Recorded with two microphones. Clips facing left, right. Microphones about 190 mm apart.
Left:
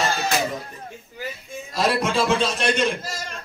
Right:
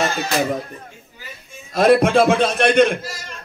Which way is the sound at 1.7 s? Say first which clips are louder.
Right 9 dB; 55° right (ahead or behind).